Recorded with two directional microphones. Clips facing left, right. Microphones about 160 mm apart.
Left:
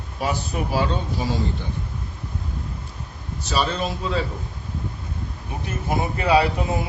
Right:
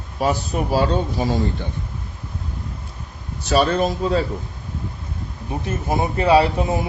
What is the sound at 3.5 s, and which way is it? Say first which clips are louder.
Speech: right 6 dB; 55° right (ahead or behind).